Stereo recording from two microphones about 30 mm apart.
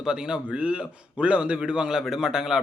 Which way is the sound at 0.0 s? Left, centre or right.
Right.